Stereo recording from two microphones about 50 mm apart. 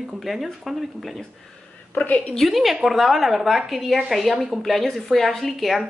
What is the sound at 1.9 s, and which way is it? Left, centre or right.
Speech, left.